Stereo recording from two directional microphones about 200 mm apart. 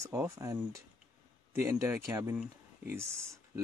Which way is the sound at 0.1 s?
15° right (ahead or behind).